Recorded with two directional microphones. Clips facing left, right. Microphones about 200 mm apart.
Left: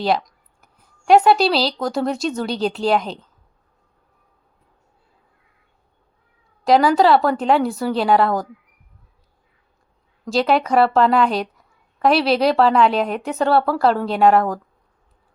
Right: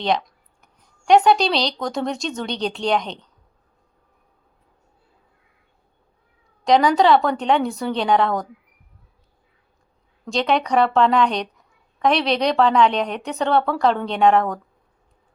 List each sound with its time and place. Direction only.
0.0 s speech: centre (ahead or behind)
6.7 s a woman's voice: 5° left (ahead or behind)
10.2 s a woman's voice: 5° left (ahead or behind)